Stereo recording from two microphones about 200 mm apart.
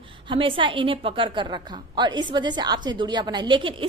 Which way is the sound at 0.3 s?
25° right (ahead or behind).